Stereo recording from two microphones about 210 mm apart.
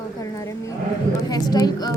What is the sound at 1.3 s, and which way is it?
Speech, 20° left (ahead or behind).